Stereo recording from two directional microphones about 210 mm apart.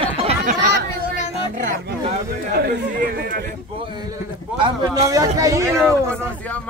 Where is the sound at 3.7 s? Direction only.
20° right (ahead or behind).